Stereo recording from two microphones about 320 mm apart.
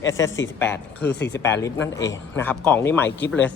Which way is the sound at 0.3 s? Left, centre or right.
Left.